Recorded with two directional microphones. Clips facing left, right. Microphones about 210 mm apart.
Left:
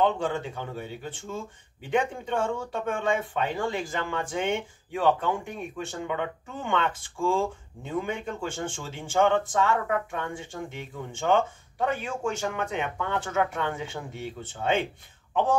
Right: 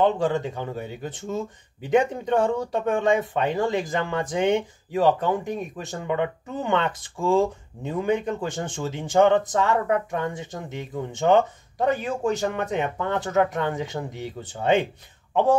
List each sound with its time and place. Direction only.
0.0 s speech: 40° right (ahead or behind)
3.8 s speech: 20° right (ahead or behind)
4.4 s speech: 40° right (ahead or behind)